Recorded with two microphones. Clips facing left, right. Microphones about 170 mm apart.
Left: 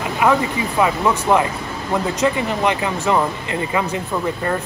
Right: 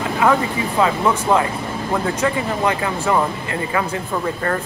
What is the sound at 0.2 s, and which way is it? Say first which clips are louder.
Speech: even; 15° left (ahead or behind).